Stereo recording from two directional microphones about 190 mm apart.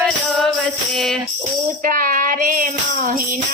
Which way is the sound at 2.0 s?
45° right (ahead or behind).